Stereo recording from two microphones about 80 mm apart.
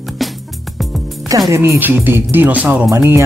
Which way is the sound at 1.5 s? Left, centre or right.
Right.